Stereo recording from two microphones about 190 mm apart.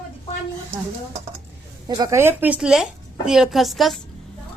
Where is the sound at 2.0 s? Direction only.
15° right (ahead or behind); by 3.9 s centre (ahead or behind).